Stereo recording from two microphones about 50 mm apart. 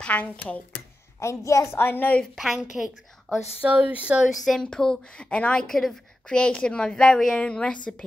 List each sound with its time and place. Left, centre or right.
0.0 s a woman's voice: left
1.2 s a woman's voice: left
1.8 s a woman's voice: left
2.3 s a woman's voice: centre
3.6 s speech: right
4.5 s a woman's voice: centre
5.7 s a woman's voice: centre
6.2 s a woman's voice: left
7.3 s a woman's voice: left